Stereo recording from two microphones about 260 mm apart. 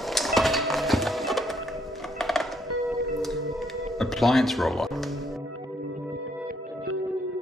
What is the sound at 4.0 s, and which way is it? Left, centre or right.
Speech, centre.